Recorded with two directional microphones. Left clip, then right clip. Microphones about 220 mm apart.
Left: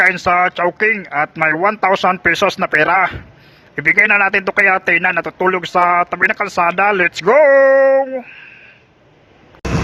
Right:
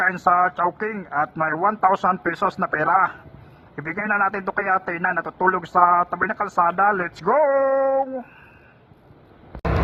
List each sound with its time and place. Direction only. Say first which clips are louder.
0.0 s a man's voice: left 5 dB; 35° left (ahead or behind)